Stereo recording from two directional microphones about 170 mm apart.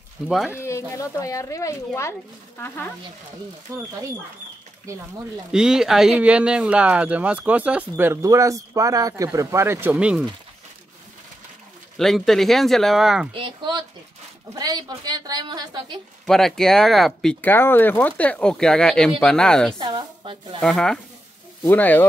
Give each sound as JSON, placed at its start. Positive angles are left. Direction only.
{"t": 0.6, "sound": "speech", "side_deg": 15}
{"t": 3.7, "sound": "speech", "side_deg": -15}
{"t": 5.5, "sound": "speech", "side_deg": -5}
{"t": 12.0, "sound": "speech", "side_deg": 0}
{"t": 13.3, "sound": "a woman's voice", "side_deg": -30}
{"t": 16.3, "sound": "speech", "side_deg": 0}
{"t": 19.8, "sound": "a woman's voice", "side_deg": -25}
{"t": 20.6, "sound": "speech", "side_deg": 5}